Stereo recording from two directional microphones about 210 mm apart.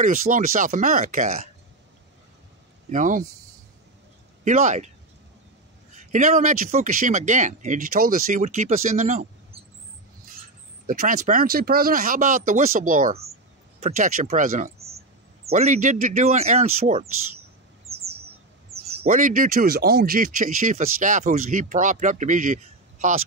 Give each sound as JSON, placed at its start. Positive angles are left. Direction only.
{"t": 0.0, "sound": "speech", "side_deg": -40}
{"t": 2.9, "sound": "speech", "side_deg": -35}
{"t": 4.5, "sound": "speech", "side_deg": -35}
{"t": 6.1, "sound": "speech", "side_deg": -35}
{"t": 10.9, "sound": "speech", "side_deg": -40}
{"t": 17.8, "sound": "chirp", "side_deg": -30}
{"t": 18.8, "sound": "speech", "side_deg": -40}